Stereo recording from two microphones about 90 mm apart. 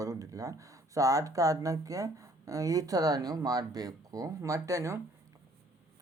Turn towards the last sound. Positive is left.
turn(degrees=-35)  # may be behind; listen again after turning